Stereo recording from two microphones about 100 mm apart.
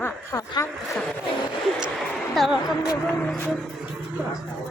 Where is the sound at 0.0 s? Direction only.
35° left (ahead or behind).